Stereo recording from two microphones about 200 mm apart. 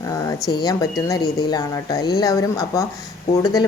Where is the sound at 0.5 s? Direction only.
20° left (ahead or behind).